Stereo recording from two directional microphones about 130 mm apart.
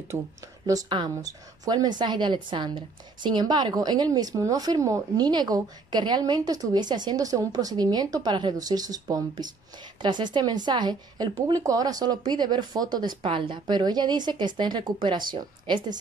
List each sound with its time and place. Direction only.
0.1 s speech: 20° right (ahead or behind)
0.7 s a woman's voice: 35° right (ahead or behind)